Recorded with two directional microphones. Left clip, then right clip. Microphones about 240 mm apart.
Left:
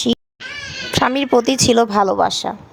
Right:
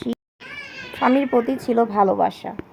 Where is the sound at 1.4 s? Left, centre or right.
Left.